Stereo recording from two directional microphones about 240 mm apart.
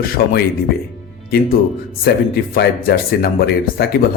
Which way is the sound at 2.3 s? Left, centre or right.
Left.